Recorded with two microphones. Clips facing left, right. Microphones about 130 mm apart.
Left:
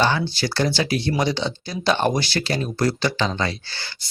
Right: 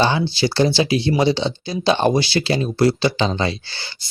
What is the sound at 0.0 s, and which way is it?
Speech, 20° right (ahead or behind).